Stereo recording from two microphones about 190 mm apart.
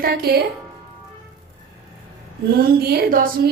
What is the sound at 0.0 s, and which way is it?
Speech, 55° right (ahead or behind).